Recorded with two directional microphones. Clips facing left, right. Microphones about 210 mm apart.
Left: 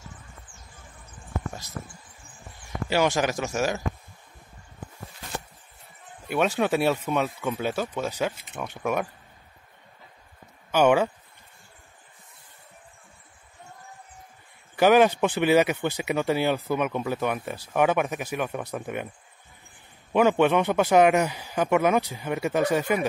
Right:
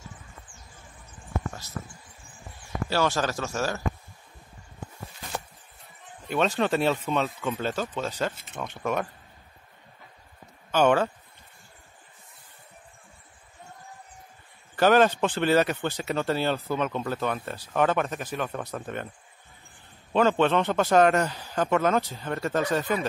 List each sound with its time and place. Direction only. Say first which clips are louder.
2.9 s speech: left 3 dB; 15° left (ahead or behind)
6.2 s speech: left 1 dB; 10° left (ahead or behind)
10.7 s speech: left 2 dB; 10° left (ahead or behind)
14.8 s speech: left 2 dB; 10° left (ahead or behind)
20.1 s speech: left 2 dB; 10° left (ahead or behind)